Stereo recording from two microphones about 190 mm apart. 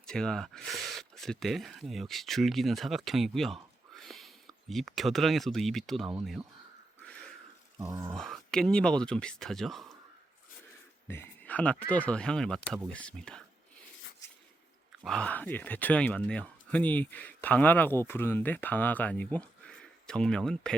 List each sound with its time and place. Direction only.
0.0 s speech: 5° left (ahead or behind)
7.0 s a sound: 5° left (ahead or behind)
7.8 s a sound: 20° right (ahead or behind)
8.1 s speech: centre (ahead or behind)
11.1 s speech: 10° left (ahead or behind)
15.0 s speech: 5° left (ahead or behind)